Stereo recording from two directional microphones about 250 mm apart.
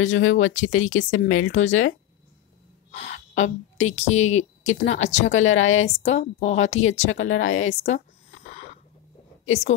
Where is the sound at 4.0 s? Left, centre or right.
Left.